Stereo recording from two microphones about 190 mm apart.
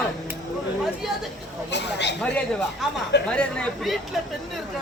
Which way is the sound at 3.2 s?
5° left (ahead or behind).